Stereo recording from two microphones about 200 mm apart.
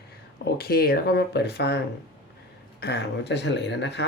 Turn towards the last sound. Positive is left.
turn(degrees=60)  # may be behind; listen again after turning